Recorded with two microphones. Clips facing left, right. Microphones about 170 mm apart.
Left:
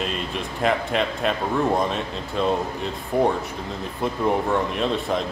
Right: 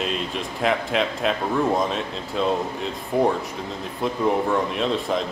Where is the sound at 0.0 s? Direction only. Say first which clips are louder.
Right 1 dB; centre (ahead or behind).